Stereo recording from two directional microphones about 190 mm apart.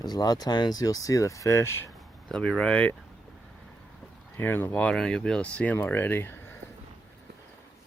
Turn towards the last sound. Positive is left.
turn(degrees=10)  # may be behind; listen again after turning